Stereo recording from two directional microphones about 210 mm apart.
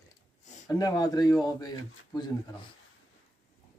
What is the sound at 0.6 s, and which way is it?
Speech, 20° left (ahead or behind).